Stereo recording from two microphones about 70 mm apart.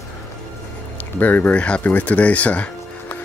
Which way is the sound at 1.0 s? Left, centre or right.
Left.